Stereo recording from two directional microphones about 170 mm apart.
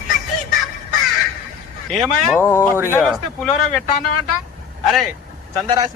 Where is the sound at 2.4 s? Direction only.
15° left (ahead or behind).